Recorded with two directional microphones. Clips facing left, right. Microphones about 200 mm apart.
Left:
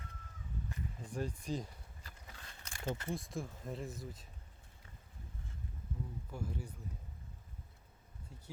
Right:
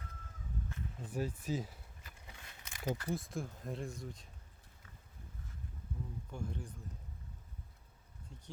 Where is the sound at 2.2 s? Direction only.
15° right (ahead or behind).